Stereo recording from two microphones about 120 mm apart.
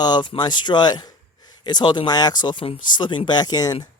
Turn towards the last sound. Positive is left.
turn(degrees=35)  # may be behind; listen again after turning